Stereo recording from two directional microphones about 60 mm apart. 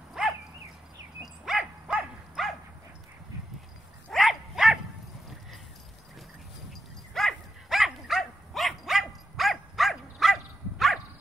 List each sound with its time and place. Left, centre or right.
0.2 s dog: centre
4.1 s dog: centre
6.7 s dog: centre